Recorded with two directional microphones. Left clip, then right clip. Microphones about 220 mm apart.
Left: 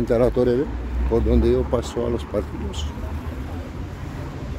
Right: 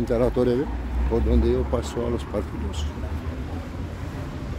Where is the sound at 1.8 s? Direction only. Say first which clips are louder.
Left 3 dB; 15° left (ahead or behind).